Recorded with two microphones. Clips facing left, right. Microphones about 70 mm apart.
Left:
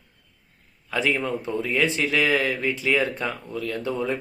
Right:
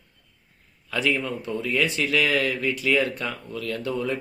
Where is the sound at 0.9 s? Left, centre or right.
Left.